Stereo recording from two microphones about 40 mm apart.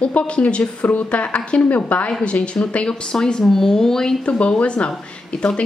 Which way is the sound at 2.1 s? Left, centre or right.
Left.